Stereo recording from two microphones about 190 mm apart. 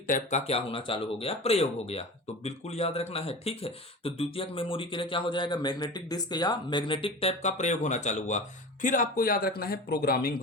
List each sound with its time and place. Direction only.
0.1 s speech: 35° left (ahead or behind); by 10.3 s 50° left (ahead or behind)